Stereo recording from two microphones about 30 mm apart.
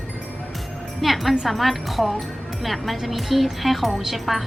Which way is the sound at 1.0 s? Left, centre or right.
Centre.